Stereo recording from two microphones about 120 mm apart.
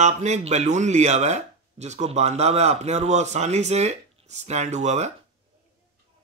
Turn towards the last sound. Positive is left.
turn(degrees=-70)  # may be behind; listen again after turning